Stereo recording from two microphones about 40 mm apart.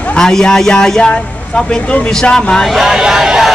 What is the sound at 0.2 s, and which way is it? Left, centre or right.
Speech, centre.